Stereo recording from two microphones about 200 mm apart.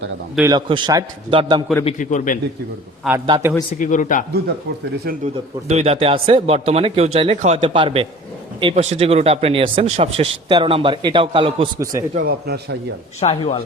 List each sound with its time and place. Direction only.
0.3 s a man's voice: 20° right (ahead or behind)
1.8 s a man's voice: 35° left (ahead or behind)
3.2 s a man's voice: 20° right (ahead or behind)
3.7 s a man's voice: 40° left (ahead or behind)
5.0 s a man's voice: 35° right (ahead or behind)
12.1 s a man's voice: 50° right (ahead or behind)
13.1 s speech: 30° left (ahead or behind)